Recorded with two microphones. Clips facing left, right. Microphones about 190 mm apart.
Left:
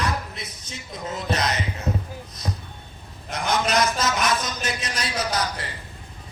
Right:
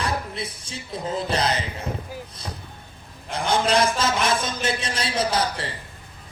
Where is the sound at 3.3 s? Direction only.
30° right (ahead or behind).